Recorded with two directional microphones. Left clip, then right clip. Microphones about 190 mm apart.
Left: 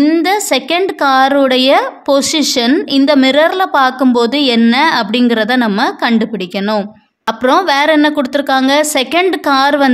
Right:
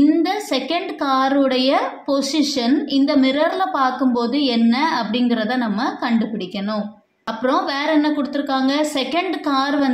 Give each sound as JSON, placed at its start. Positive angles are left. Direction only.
{"t": 0.0, "sound": "a woman's voice", "side_deg": 45}
{"t": 7.4, "sound": "a woman's voice", "side_deg": 45}